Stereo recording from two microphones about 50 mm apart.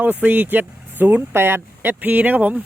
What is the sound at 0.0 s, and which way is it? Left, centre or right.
Speech, right.